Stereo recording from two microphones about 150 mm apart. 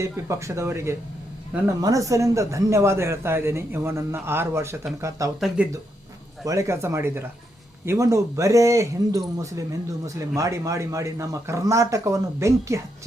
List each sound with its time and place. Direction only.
0.0 s speech: 20° right (ahead or behind)
5.6 s speech: 10° right (ahead or behind)
6.4 s speech: 20° right (ahead or behind)